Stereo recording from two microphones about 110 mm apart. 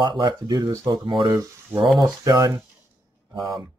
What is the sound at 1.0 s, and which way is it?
Speech, 45° right (ahead or behind).